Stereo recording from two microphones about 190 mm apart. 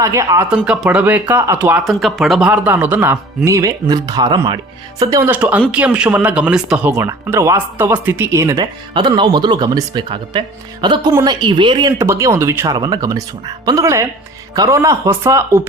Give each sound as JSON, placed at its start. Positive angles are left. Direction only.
{"t": 0.0, "sound": "speech", "side_deg": -15}
{"t": 0.5, "sound": "speech", "side_deg": -5}